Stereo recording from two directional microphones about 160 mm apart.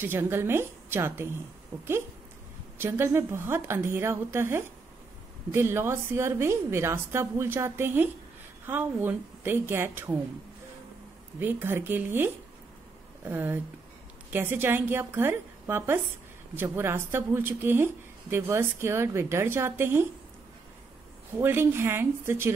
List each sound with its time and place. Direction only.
0.0 s speech: 15° right (ahead or behind)
2.8 s speech: 15° right (ahead or behind)
11.3 s speech: 15° right (ahead or behind)
21.4 s speech: 15° right (ahead or behind)